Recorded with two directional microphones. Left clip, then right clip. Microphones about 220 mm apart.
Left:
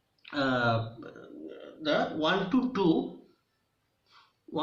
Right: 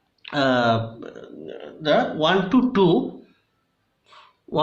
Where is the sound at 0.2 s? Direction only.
40° right (ahead or behind).